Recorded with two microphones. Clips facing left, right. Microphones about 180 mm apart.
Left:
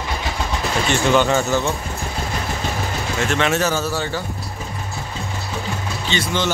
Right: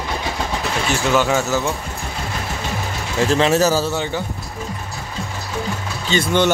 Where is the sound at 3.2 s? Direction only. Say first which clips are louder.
Right 5 dB; 35° right (ahead or behind).